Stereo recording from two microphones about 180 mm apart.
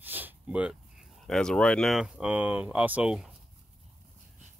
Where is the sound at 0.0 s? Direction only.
10° right (ahead or behind).